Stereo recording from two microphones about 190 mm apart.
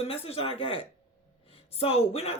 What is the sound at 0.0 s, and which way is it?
Speech, 30° left (ahead or behind).